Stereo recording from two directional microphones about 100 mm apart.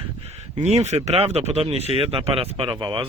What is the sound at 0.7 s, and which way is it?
Speech, 90° right.